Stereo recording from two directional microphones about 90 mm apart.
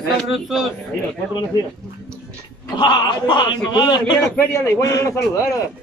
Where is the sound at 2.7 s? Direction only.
55° left (ahead or behind).